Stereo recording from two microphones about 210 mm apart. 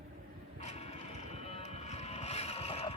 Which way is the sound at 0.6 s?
30° left (ahead or behind).